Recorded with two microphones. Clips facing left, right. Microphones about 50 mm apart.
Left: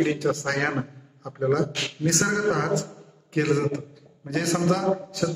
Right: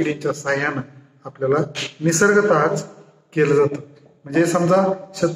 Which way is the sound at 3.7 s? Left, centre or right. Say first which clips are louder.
Right 2 dB; right.